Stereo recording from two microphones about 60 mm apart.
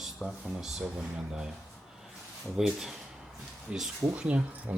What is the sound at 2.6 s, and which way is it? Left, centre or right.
Speech, centre.